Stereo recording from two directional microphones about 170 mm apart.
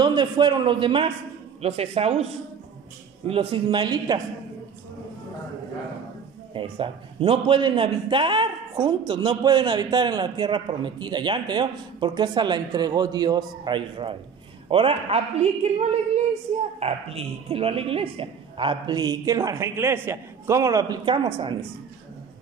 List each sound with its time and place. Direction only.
0.0 s a man's voice: 25° right (ahead or behind)
3.3 s a man's voice: 35° right (ahead or behind)
6.5 s a man's voice: 30° right (ahead or behind)